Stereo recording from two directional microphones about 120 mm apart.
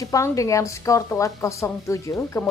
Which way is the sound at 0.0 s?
25° left (ahead or behind).